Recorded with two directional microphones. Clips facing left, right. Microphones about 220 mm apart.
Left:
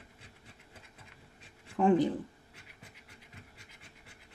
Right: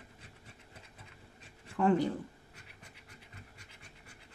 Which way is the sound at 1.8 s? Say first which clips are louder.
Left 3 dB; 15° left (ahead or behind).